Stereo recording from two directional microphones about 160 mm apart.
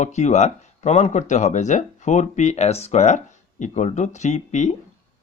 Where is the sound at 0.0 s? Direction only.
45° left (ahead or behind).